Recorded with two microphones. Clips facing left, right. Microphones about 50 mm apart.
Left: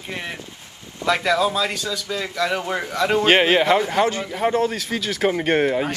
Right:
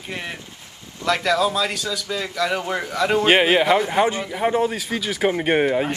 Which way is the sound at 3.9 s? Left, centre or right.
Centre.